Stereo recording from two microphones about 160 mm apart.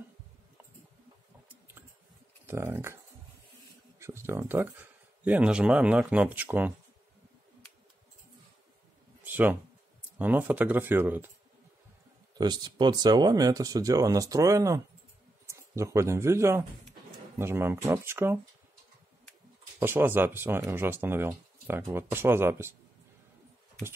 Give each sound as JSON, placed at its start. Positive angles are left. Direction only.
{"t": 2.4, "sound": "speech", "side_deg": -15}
{"t": 4.0, "sound": "speech", "side_deg": -15}
{"t": 9.2, "sound": "a sound", "side_deg": -10}
{"t": 10.1, "sound": "speech", "side_deg": -10}
{"t": 12.4, "sound": "speech", "side_deg": -25}
{"t": 19.8, "sound": "speech", "side_deg": -15}